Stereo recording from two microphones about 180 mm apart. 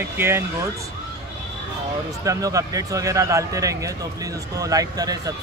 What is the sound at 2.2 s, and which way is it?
Speech, 20° right (ahead or behind).